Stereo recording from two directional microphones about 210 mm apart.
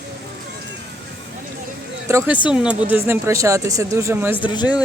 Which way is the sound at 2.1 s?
15° right (ahead or behind).